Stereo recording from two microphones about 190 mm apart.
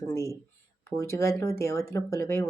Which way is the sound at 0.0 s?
15° left (ahead or behind).